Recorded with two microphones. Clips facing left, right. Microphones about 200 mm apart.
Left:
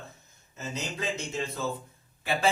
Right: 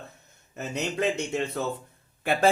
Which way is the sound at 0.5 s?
65° right (ahead or behind).